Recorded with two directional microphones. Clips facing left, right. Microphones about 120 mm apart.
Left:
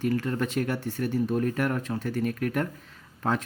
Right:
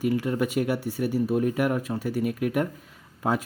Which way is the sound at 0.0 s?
10° right (ahead or behind).